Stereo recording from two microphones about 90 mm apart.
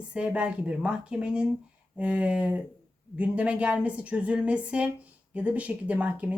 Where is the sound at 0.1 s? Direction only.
15° right (ahead or behind).